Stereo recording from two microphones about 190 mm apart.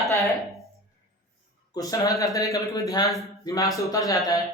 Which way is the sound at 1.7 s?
20° left (ahead or behind).